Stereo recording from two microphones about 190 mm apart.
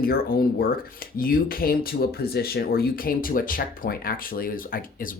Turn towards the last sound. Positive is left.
turn(degrees=45)  # may be behind; listen again after turning